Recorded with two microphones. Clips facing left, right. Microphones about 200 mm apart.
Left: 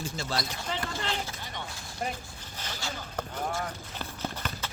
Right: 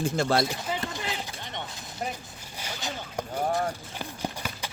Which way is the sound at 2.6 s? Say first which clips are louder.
Right 3 dB; 10° right (ahead or behind).